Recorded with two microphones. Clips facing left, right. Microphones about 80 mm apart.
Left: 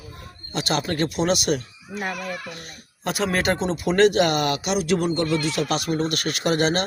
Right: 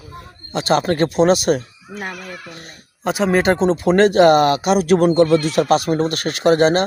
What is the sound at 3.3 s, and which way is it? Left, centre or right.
A woman's voice, right.